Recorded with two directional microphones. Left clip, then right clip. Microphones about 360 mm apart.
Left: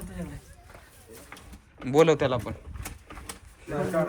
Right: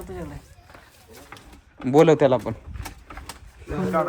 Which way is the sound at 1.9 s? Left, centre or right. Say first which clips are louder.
Right 5 dB; centre.